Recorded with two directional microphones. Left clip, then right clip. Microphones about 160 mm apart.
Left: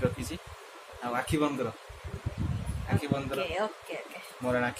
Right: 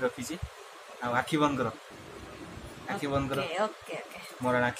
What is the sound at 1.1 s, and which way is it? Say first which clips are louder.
Speech: right 2 dB; 10° right (ahead or behind).